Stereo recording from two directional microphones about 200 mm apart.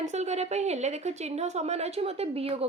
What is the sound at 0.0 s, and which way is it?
A woman's voice, 35° right (ahead or behind).